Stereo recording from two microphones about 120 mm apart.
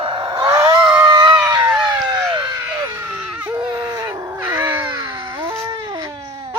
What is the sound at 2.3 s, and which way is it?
Screaming, 35° right (ahead or behind).